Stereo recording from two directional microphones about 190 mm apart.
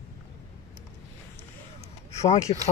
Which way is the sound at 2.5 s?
35° left (ahead or behind).